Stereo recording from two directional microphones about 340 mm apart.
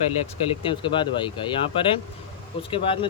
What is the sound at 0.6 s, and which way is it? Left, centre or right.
Speech, centre.